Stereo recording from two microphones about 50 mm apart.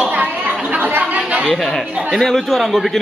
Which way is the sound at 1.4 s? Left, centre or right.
Centre.